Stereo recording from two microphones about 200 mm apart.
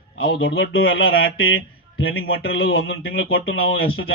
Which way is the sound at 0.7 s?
80° left.